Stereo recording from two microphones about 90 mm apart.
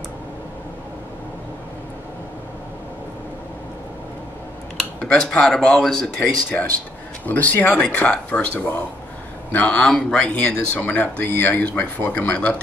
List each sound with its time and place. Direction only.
4.7 s speech: 5° left (ahead or behind)
6.1 s speech: 20° left (ahead or behind)